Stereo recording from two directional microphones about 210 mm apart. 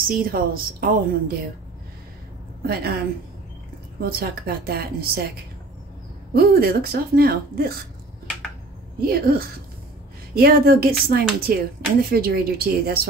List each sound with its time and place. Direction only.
0.1 s speech: 45° right (ahead or behind)
2.6 s speech: 45° right (ahead or behind)
4.0 s speech: 45° right (ahead or behind)
6.3 s speech: 45° right (ahead or behind)
9.0 s speech: 45° right (ahead or behind)